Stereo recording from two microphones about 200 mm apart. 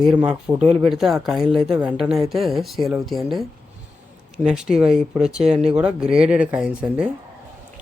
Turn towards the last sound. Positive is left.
turn(degrees=-5)  # may be behind; listen again after turning